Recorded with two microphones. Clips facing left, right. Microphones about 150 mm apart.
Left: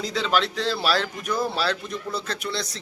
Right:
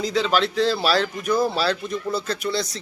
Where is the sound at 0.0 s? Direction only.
Centre (ahead or behind).